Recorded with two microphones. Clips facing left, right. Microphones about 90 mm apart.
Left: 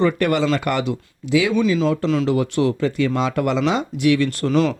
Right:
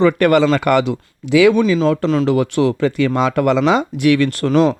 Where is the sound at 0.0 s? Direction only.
75° right (ahead or behind).